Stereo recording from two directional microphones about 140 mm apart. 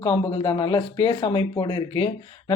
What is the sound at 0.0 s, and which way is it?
Speech, 35° left (ahead or behind).